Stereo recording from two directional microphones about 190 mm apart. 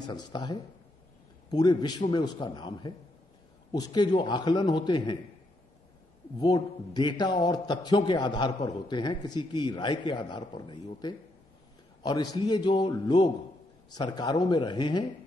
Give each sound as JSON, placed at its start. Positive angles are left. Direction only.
{"t": 0.0, "sound": "a man's voice", "side_deg": 20}
{"t": 6.3, "sound": "a man's voice", "side_deg": 20}